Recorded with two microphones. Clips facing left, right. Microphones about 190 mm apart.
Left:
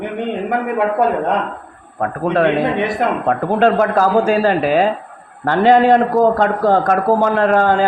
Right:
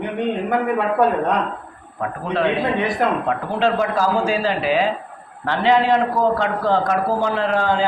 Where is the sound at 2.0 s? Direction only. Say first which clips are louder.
Left 5 dB; 55° left (ahead or behind).